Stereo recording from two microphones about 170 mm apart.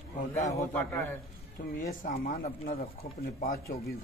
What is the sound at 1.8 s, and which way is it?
Speech, 55° left (ahead or behind).